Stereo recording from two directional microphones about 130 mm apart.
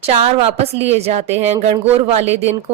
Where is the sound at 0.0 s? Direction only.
50° right (ahead or behind).